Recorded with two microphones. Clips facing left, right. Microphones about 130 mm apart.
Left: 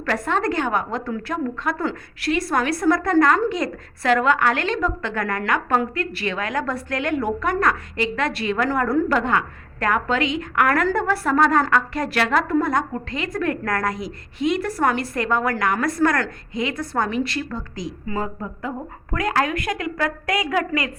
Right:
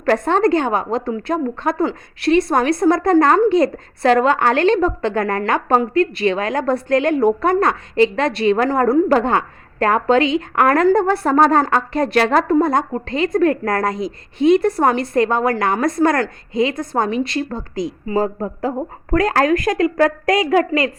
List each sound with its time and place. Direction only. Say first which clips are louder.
0.3 s a woman's voice: right 4 dB; 25° right (ahead or behind)